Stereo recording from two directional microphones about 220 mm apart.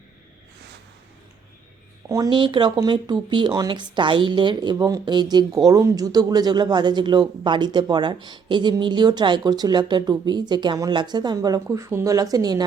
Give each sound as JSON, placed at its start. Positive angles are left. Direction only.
{"t": 2.0, "sound": "speech", "side_deg": -15}